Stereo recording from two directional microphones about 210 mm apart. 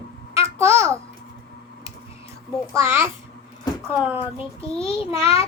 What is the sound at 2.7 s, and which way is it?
A woman's voice, 10° right (ahead or behind).